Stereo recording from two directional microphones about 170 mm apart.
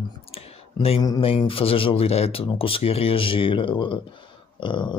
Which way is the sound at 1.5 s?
35° left (ahead or behind).